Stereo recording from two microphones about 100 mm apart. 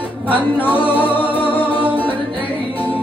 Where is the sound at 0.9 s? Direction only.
20° left (ahead or behind).